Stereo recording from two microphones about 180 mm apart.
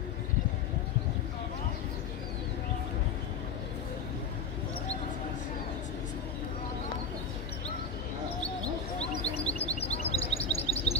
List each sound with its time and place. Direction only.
9.0 s chirp: 35° left (ahead or behind)